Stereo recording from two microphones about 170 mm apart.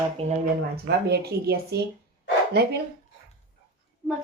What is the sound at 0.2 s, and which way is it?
Speech, 40° right (ahead or behind).